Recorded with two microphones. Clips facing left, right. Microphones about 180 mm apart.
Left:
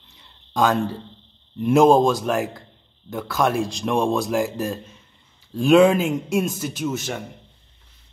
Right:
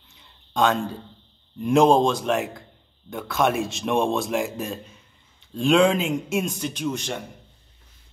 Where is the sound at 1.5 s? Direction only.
5° left (ahead or behind).